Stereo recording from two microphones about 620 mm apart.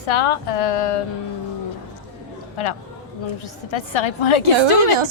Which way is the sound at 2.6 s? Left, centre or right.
Left.